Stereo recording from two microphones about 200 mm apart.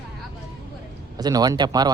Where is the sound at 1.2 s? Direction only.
20° right (ahead or behind).